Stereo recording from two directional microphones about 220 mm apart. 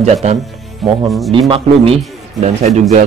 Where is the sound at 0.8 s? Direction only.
Centre (ahead or behind).